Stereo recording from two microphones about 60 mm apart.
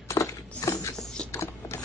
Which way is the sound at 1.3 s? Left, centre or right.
Left.